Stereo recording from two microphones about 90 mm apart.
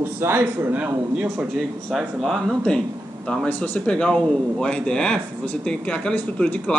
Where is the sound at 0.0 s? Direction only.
25° right (ahead or behind).